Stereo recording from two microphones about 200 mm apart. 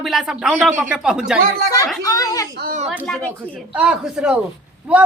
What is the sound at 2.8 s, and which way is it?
A woman's voice, centre (ahead or behind).